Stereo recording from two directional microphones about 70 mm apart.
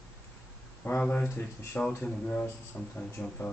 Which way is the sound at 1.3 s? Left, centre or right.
Left.